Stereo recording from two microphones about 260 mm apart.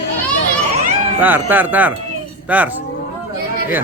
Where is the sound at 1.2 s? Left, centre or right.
Centre.